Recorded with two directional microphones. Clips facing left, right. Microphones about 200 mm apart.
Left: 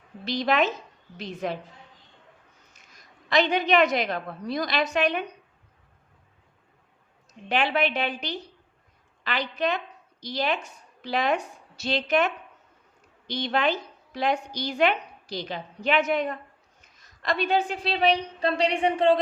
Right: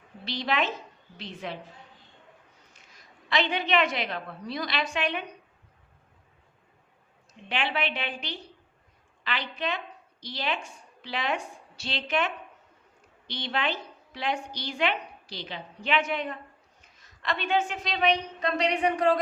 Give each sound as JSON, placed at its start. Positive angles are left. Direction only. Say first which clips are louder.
{"t": 0.3, "sound": "a woman's voice", "louder": "left 5 dB", "side_deg": 45}
{"t": 2.9, "sound": "a woman's voice", "louder": "left 5 dB", "side_deg": 40}
{"t": 7.4, "sound": "a woman's voice", "louder": "left 5 dB", "side_deg": 40}